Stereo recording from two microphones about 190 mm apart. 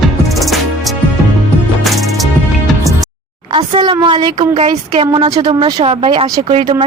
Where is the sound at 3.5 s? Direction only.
30° right (ahead or behind).